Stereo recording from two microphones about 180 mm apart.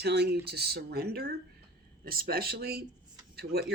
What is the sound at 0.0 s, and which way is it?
Speech, 65° right (ahead or behind).